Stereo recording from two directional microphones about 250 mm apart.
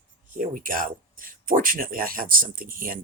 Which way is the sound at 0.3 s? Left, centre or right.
Right.